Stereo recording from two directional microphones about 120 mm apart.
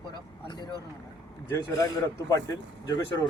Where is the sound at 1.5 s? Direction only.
30° left (ahead or behind).